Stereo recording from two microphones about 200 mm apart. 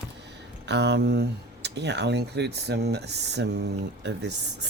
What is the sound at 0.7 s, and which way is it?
Speech, 60° right (ahead or behind).